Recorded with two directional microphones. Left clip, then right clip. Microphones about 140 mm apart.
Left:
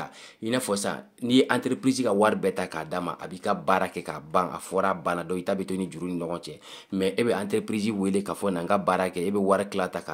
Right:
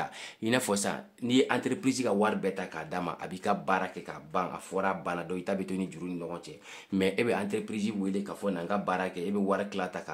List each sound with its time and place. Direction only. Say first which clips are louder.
0.0 s speech: right 1 dB; centre (ahead or behind)
0.8 s speech: left 4 dB; 15° left (ahead or behind)
2.1 s speech: left 6 dB; 30° left (ahead or behind)
7.0 s speech: left 3 dB; 10° left (ahead or behind)
7.5 s speech: left 6 dB; 35° left (ahead or behind)